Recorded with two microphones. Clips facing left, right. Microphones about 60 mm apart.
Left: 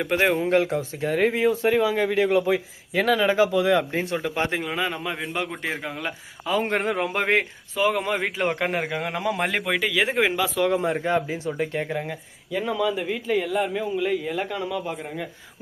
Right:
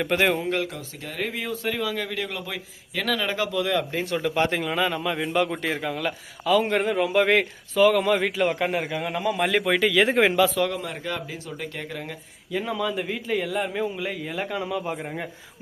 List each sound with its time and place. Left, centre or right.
0.0 s speech: centre
0.4 s speech: left
4.2 s speech: centre; by 7.3 s left
7.3 s speech: left
8.4 s a man's voice: left
9.0 s a man's voice: left
9.6 s speech: centre
10.5 s speech: left
12.5 s a man's voice: centre